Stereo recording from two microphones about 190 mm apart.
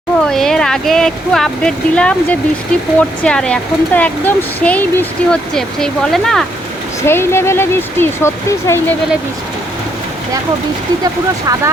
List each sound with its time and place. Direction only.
0.3 s speech: 5° left (ahead or behind)
7.0 s speech: 15° left (ahead or behind)
11.0 s speech: 20° right (ahead or behind)